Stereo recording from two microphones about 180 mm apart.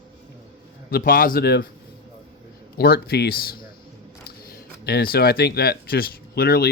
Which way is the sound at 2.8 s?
60° left (ahead or behind).